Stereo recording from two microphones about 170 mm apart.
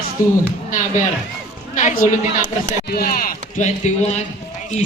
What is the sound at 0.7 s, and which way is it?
Speech, 50° left (ahead or behind).